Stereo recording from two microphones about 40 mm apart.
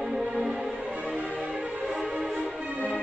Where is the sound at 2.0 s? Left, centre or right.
Centre.